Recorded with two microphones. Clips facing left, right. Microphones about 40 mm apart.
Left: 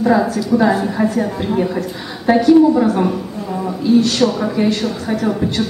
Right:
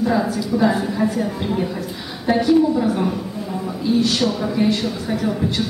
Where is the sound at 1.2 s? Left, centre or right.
Centre.